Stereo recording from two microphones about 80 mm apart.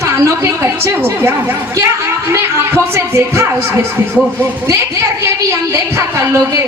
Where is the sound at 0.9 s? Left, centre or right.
Right.